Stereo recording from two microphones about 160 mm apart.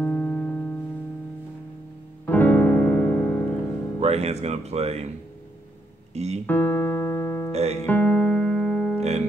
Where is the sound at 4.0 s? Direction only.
40° right (ahead or behind).